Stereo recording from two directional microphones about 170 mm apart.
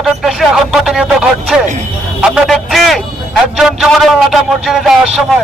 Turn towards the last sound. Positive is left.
turn(degrees=0)  # may be behind; listen again after turning